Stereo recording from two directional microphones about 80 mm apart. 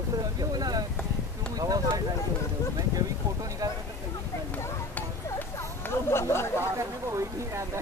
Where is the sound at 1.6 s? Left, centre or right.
Right.